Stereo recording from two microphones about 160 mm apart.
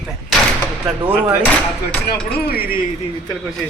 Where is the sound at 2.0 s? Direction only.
75° left (ahead or behind).